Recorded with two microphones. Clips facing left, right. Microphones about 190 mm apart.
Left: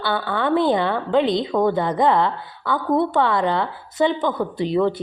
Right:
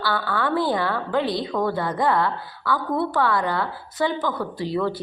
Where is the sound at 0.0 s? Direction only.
20° left (ahead or behind).